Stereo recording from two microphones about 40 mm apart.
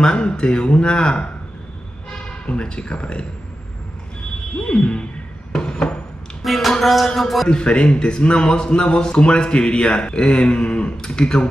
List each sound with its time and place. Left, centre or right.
0.0 s a man's voice: left
4.6 s a man's voice: left
5.5 s a sound: centre
6.4 s a sound: centre
6.7 s music: centre
7.2 s a man's voice: centre
7.4 s a man's voice: left